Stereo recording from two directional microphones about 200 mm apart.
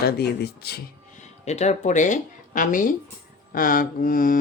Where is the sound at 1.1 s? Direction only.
35° left (ahead or behind).